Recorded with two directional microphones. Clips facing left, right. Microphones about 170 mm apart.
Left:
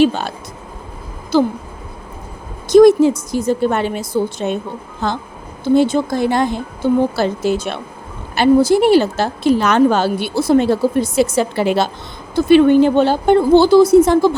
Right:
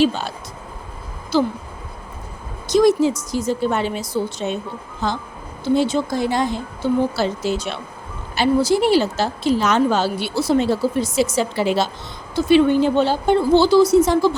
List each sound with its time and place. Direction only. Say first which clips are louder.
0.0 s a woman's voice: left 4 dB; 55° left (ahead or behind)
2.6 s a woman's voice: left 7 dB; 55° left (ahead or behind)